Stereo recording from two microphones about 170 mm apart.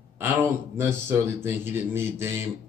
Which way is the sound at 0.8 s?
15° right (ahead or behind).